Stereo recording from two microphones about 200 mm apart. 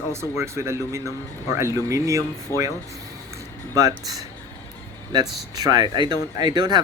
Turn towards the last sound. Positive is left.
turn(degrees=-20)  # may be behind; listen again after turning